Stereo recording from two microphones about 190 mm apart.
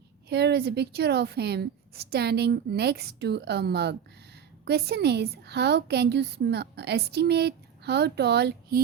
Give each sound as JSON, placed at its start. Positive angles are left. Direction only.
{"t": 0.3, "sound": "a woman's voice", "side_deg": -60}